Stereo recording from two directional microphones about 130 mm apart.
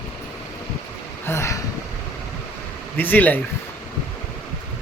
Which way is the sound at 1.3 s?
20° left (ahead or behind).